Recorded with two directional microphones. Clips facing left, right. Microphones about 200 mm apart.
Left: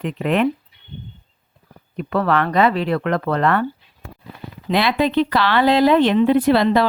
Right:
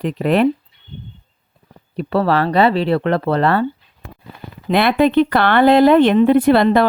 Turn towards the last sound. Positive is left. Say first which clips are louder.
# right 3 dB
turn(degrees=-55)  # may be behind; listen again after turning